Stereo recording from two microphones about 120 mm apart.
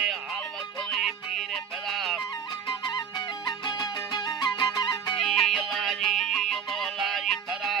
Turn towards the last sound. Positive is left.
turn(degrees=0)  # may be behind; listen again after turning